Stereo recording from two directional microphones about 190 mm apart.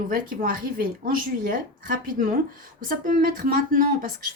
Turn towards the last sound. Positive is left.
turn(degrees=-45)  # may be behind; listen again after turning